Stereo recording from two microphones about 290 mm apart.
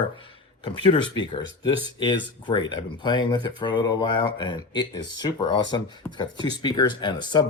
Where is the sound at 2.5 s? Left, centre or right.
Centre.